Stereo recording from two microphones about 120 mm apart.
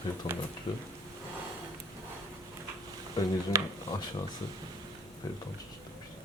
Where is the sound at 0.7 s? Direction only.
35° left (ahead or behind).